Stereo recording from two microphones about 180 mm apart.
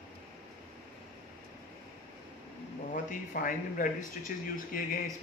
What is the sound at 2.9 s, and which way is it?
Speech, 50° left (ahead or behind).